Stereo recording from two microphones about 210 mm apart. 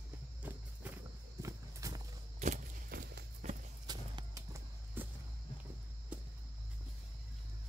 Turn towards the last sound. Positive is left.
turn(degrees=-5)  # may be behind; listen again after turning